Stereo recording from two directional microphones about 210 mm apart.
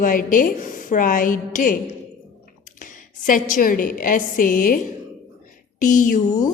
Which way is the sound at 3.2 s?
40° left (ahead or behind).